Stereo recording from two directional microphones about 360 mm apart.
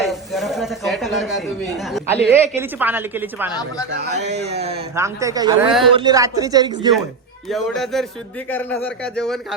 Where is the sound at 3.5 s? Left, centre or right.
Centre.